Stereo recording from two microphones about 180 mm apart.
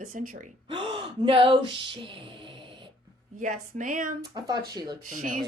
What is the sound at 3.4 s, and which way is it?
Speech, 45° right (ahead or behind).